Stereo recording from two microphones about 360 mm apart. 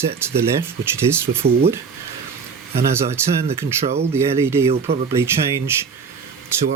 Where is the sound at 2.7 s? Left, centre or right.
Centre.